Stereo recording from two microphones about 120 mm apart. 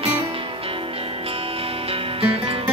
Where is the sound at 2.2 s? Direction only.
50° right (ahead or behind).